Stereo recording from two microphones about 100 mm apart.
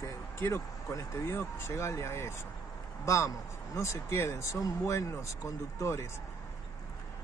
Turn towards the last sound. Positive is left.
turn(degrees=30)  # may be behind; listen again after turning